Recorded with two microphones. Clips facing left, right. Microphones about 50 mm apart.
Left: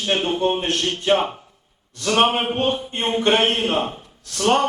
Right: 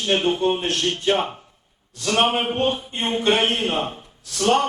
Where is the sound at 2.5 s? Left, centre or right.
Left.